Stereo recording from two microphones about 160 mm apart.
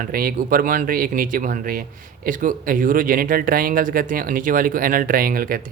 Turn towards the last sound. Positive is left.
turn(degrees=-65)  # may be behind; listen again after turning